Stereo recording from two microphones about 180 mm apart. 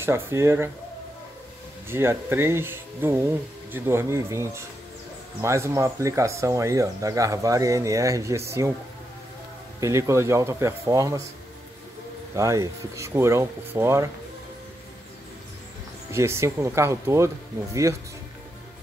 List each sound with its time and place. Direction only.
0.0 s speech: 15° right (ahead or behind)
1.9 s speech: 15° right (ahead or behind)
9.8 s speech: 15° right (ahead or behind)
12.4 s speech: 15° right (ahead or behind)
16.1 s speech: 15° right (ahead or behind)